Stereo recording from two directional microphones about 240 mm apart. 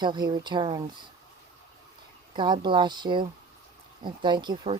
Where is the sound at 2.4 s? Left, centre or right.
Centre.